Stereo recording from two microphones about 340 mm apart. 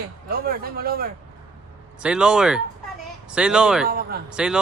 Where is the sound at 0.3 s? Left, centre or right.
Right.